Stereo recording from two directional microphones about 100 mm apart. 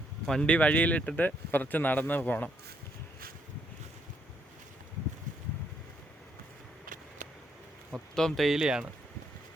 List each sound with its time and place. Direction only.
0.3 s speech: 10° left (ahead or behind)
8.1 s speech: 5° left (ahead or behind)